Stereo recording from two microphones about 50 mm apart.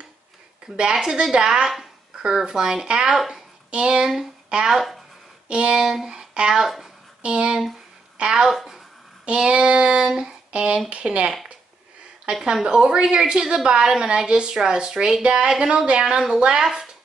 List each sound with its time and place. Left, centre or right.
0.7 s a woman's voice: centre
4.7 s speech: centre
5.5 s a woman's voice: centre
7.2 s a woman's voice: centre
9.2 s a woman's voice: centre